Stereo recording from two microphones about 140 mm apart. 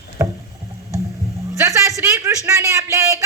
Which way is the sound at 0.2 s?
20° right (ahead or behind).